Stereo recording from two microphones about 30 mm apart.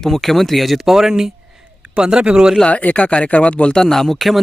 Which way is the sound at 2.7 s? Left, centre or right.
Left.